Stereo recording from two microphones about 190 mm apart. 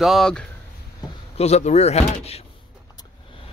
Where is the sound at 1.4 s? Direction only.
35° left (ahead or behind).